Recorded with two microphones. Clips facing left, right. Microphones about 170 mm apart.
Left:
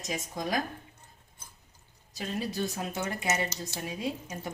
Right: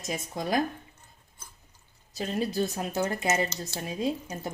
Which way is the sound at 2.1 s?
35° right (ahead or behind).